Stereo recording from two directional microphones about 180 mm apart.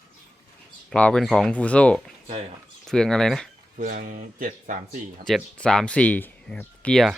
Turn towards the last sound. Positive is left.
turn(degrees=5)  # may be behind; listen again after turning